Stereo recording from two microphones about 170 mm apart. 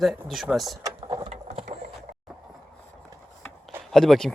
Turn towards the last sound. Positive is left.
turn(degrees=0)  # may be behind; listen again after turning